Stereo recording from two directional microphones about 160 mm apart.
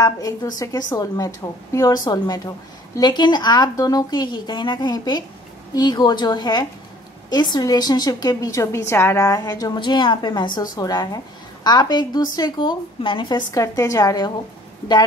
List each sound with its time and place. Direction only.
0.0 s a woman's voice: 25° left (ahead or behind)
13.5 s a woman's voice: 20° left (ahead or behind)